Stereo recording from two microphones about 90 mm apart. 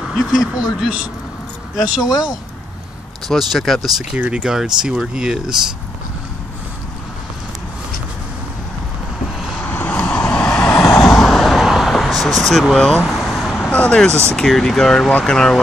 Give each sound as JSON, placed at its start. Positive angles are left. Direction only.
{"t": 0.1, "sound": "speech", "side_deg": -5}
{"t": 3.3, "sound": "speech", "side_deg": 0}
{"t": 9.6, "sound": "vehicle", "side_deg": 20}
{"t": 13.0, "sound": "vehicle", "side_deg": 0}
{"t": 13.7, "sound": "speech", "side_deg": 15}